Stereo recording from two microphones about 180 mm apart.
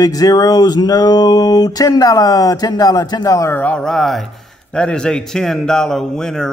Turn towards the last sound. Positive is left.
turn(degrees=5)  # may be behind; listen again after turning